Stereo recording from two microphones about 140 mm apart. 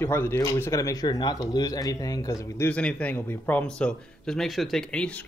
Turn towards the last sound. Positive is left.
turn(degrees=5)  # may be behind; listen again after turning